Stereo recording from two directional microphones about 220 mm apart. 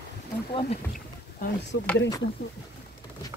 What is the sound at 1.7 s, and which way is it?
Speech, 50° left (ahead or behind).